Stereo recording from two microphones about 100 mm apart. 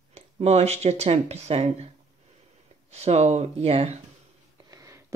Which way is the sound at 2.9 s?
90° right.